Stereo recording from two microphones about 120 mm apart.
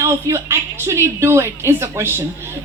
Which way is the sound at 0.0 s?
25° right (ahead or behind).